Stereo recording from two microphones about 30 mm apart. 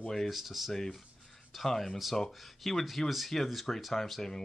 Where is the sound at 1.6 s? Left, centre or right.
Centre.